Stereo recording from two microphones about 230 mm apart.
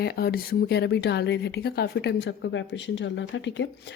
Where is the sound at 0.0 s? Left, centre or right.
Left.